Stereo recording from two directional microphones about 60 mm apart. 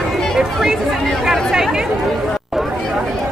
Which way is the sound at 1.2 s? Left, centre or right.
Centre.